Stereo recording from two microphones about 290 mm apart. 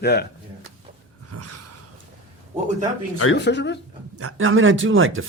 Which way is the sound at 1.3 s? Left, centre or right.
Right.